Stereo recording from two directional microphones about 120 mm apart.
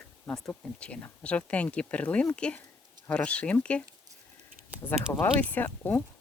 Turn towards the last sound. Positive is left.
turn(degrees=15)  # may be behind; listen again after turning